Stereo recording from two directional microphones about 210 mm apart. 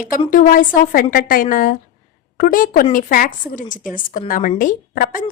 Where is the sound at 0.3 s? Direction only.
40° left (ahead or behind).